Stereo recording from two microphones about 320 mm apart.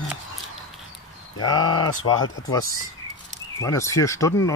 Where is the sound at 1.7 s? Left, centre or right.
Left.